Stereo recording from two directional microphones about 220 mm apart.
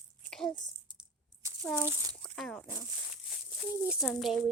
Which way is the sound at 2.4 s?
5° left (ahead or behind).